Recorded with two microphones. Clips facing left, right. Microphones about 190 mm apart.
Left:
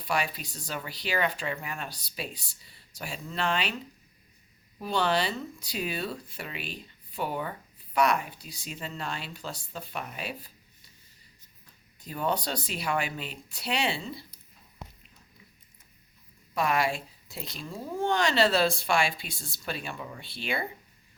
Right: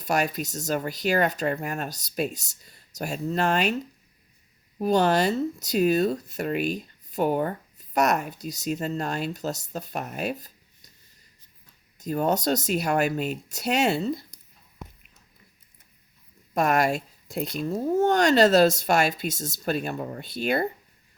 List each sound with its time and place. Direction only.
0.0 s speech: 45° right (ahead or behind)
4.8 s speech: 45° right (ahead or behind)
11.9 s speech: 45° right (ahead or behind)
16.6 s speech: 45° right (ahead or behind)